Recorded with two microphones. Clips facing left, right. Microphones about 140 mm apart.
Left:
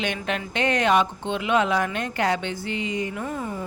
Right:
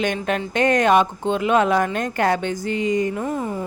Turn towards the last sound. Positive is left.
turn(degrees=-40)  # may be behind; listen again after turning